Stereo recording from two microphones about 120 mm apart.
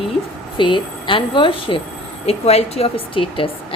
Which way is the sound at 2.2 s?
60° left (ahead or behind).